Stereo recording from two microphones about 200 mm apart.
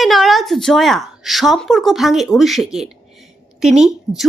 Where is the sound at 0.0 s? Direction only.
Centre (ahead or behind).